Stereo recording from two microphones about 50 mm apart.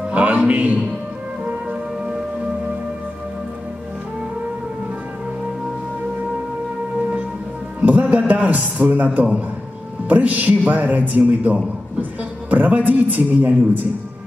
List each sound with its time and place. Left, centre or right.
0.1 s a man's voice: right
7.8 s music: right
8.8 s a man's voice: right